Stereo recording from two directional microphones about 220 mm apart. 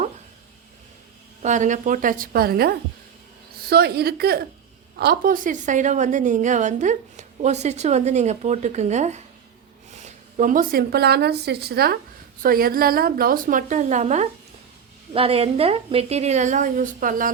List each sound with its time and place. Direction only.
1.4 s a woman's voice: 35° right (ahead or behind)